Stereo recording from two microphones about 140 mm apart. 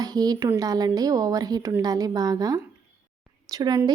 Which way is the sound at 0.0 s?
25° right (ahead or behind).